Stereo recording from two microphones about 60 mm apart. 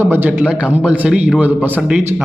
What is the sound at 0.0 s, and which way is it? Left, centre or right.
Speech, right.